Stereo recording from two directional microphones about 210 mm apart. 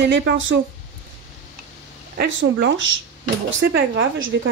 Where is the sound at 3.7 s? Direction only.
60° right (ahead or behind).